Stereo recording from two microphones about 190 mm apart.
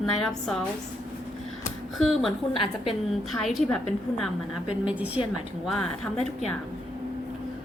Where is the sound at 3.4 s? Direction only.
Centre (ahead or behind).